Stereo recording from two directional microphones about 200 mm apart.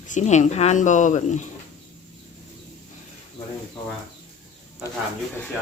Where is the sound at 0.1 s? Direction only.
35° left (ahead or behind).